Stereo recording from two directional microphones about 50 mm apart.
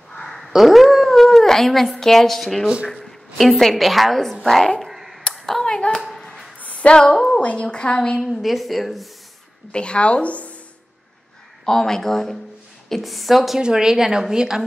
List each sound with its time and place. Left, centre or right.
0.1 s dog: centre
0.5 s a woman's voice: centre
4.9 s hands: centre
5.7 s speech: centre
5.9 s a sound: centre
6.6 s music: left
7.3 s a woman's voice: left
8.3 s speech: centre
9.7 s a woman's voice: centre
11.6 s speech: centre
13.6 s a woman's voice: centre